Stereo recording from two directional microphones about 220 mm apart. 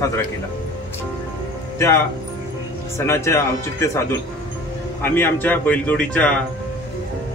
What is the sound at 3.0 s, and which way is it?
Speech, 10° left (ahead or behind).